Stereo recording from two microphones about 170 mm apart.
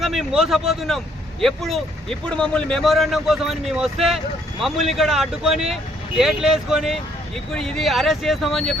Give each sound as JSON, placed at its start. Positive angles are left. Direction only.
{"t": 0.0, "sound": "speech", "side_deg": 0}